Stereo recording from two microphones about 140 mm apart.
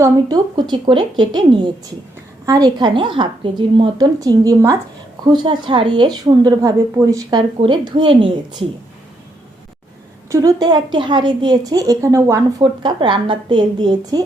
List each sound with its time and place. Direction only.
0.0 s a woman's voice: 25° right (ahead or behind)
5.2 s a woman's voice: 35° right (ahead or behind)
10.2 s a woman's voice: 25° right (ahead or behind)
12.8 s a woman's voice: 35° right (ahead or behind)